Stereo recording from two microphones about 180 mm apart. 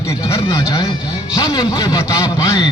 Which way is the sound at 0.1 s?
15° left (ahead or behind).